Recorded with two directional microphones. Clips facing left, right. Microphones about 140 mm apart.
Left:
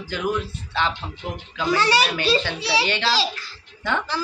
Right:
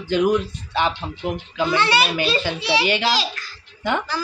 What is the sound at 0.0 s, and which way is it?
Speech, 20° right (ahead or behind).